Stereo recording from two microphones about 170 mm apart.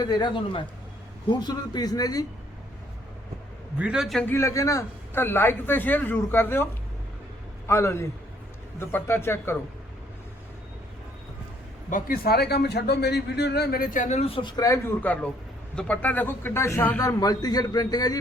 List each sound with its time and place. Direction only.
0.0 s speech: 25° left (ahead or behind)
3.8 s a man's voice: 5° right (ahead or behind)
4.3 s a man's voice: 15° left (ahead or behind)
7.7 s a man's voice: 15° left (ahead or behind)
11.9 s a man's voice: 55° left (ahead or behind); by 18.2 s 20° left (ahead or behind)